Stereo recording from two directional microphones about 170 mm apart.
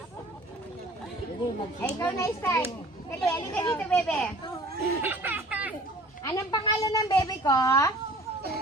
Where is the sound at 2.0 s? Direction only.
15° left (ahead or behind).